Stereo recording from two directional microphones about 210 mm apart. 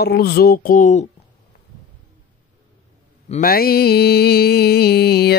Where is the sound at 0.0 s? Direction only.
50° left (ahead or behind).